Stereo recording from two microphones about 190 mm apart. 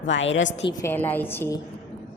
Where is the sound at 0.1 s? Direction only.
75° left (ahead or behind).